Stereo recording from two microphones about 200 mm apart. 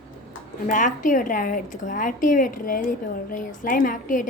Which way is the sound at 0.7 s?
40° left (ahead or behind).